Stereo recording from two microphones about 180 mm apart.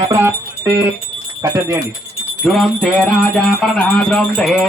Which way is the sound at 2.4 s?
Centre (ahead or behind).